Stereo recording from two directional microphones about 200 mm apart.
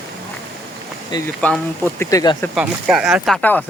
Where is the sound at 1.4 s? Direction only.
10° left (ahead or behind).